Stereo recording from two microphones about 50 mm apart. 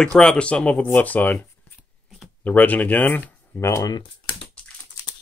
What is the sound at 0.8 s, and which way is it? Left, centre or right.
Speech, left.